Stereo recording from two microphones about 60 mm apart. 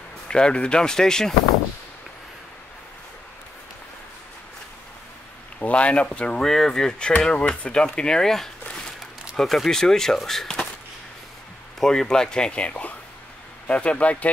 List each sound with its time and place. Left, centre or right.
0.3 s speech: centre
5.6 s speech: left
6.4 s speech: centre
11.8 s speech: centre